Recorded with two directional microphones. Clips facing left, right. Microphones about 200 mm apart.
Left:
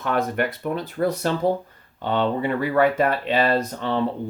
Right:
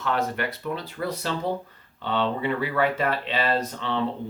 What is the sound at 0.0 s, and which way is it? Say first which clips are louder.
Speech: left 3 dB; 50° left (ahead or behind).